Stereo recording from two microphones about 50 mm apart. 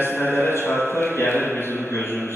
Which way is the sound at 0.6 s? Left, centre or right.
Left.